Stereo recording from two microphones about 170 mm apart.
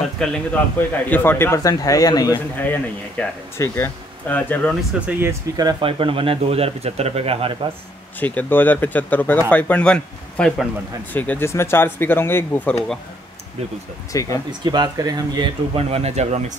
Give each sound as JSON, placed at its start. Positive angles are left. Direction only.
{"t": 0.2, "sound": "a man's voice", "side_deg": 5}
{"t": 2.6, "sound": "a man's voice", "side_deg": 10}
{"t": 5.6, "sound": "speech", "side_deg": -25}
{"t": 8.2, "sound": "a man's voice", "side_deg": 10}
{"t": 14.1, "sound": "speech", "side_deg": 20}
{"t": 14.6, "sound": "speech", "side_deg": -25}